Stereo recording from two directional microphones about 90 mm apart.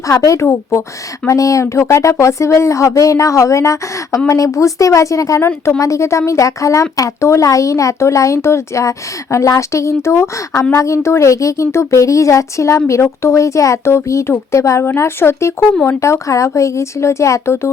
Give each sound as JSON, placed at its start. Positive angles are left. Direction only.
{"t": 0.1, "sound": "speech", "side_deg": 35}